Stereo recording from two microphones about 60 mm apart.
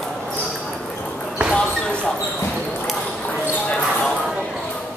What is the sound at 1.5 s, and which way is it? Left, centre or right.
Basketball bounce, centre.